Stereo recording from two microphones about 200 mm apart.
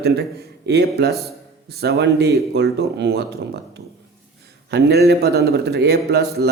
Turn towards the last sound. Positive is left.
turn(degrees=-55)  # may be behind; listen again after turning